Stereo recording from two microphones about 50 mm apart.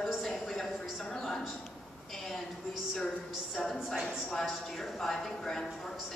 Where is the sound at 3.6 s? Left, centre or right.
Centre.